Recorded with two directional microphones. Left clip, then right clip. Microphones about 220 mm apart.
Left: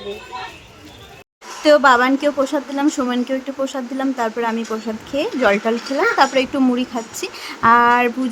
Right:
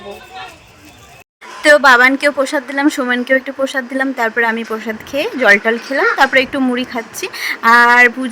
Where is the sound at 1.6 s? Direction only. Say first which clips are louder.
Right 4 dB; 25° right (ahead or behind).